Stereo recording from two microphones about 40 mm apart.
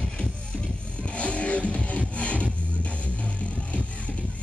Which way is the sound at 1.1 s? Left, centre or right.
Left.